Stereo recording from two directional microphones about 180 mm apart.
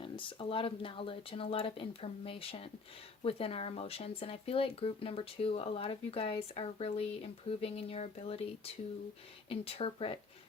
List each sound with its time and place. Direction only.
0.0 s speech: 30° left (ahead or behind)